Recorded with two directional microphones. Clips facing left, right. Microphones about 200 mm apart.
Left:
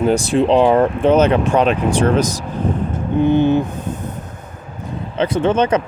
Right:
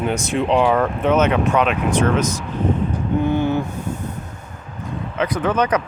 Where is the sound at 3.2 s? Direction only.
20° left (ahead or behind).